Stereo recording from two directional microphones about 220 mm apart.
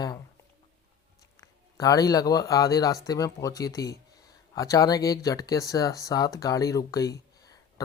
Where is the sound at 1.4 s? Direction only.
15° left (ahead or behind).